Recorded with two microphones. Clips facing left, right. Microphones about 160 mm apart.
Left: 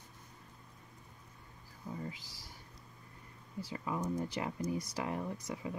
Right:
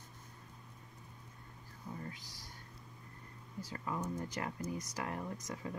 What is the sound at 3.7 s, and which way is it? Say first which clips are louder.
Speech: left 3 dB; 15° left (ahead or behind).